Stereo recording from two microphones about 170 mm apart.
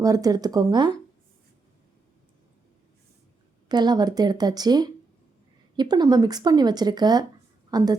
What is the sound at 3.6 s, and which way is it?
A woman's voice, 25° right (ahead or behind).